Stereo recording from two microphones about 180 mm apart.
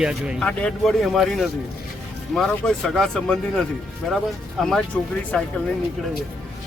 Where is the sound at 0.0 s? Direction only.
5° right (ahead or behind).